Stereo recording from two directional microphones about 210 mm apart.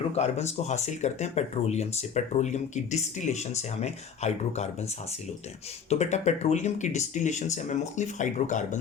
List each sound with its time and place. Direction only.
0.2 s speech: 30° left (ahead or behind)